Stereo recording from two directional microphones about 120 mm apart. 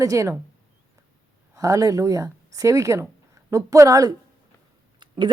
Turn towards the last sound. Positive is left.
turn(degrees=-45)  # may be behind; listen again after turning